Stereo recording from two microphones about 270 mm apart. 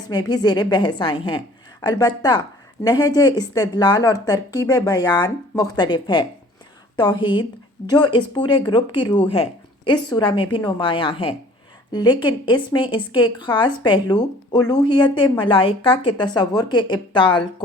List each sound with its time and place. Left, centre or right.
0.1 s a woman's voice: centre